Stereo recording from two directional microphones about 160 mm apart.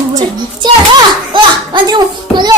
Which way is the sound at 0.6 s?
25° right (ahead or behind).